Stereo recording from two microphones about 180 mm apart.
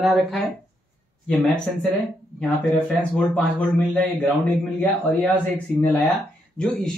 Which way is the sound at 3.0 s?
5° left (ahead or behind).